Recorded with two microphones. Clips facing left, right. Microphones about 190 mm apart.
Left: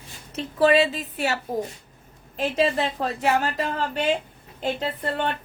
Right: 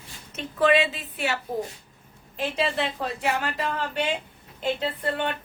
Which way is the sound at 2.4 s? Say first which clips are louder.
Left 4 dB; 40° left (ahead or behind).